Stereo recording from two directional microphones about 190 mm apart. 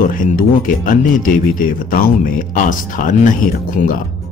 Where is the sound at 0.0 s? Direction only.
45° left (ahead or behind).